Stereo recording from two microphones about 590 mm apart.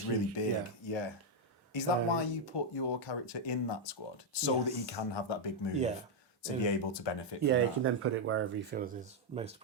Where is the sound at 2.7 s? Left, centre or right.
Left.